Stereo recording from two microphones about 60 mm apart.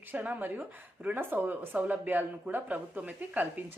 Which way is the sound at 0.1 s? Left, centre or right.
Right.